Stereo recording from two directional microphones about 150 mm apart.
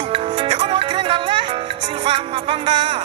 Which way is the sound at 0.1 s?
40° right (ahead or behind).